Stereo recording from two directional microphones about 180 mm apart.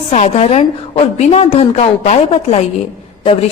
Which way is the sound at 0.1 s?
35° left (ahead or behind).